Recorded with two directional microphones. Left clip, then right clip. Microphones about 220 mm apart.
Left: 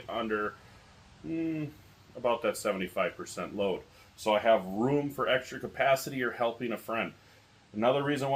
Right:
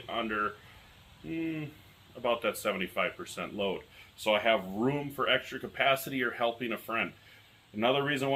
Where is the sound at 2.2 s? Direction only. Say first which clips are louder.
Left 1 dB; 15° left (ahead or behind).